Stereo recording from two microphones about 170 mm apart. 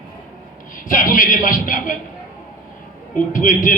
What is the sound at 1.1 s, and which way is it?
Speech, 55° left (ahead or behind).